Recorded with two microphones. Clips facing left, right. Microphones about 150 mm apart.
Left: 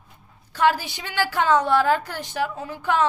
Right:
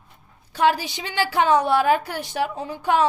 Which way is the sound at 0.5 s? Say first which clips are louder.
Right 1 dB; 15° right (ahead or behind).